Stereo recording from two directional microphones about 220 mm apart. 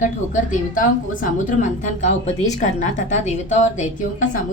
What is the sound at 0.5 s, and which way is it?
A woman's voice, 35° left (ahead or behind).